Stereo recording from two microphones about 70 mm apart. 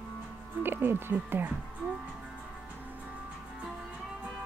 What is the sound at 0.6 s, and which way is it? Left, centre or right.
Speech, right.